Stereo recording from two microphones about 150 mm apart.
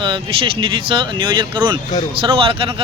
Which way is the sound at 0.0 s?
35° right (ahead or behind).